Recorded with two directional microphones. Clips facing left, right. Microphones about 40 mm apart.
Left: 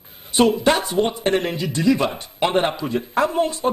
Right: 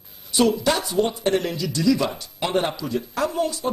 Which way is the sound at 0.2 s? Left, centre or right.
Left.